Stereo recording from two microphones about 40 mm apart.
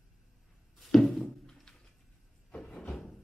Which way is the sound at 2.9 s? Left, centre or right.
Centre.